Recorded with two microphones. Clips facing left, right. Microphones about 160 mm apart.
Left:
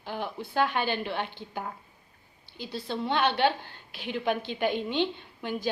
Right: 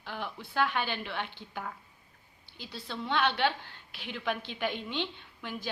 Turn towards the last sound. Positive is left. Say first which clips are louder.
# left 7 dB
turn(degrees=35)  # may be behind; listen again after turning